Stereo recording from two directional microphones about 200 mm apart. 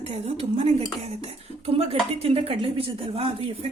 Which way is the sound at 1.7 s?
30° right (ahead or behind).